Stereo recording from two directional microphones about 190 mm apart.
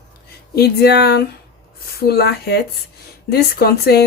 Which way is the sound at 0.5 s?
60° left (ahead or behind).